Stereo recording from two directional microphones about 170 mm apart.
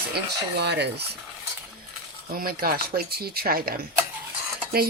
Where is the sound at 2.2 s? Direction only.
60° right (ahead or behind).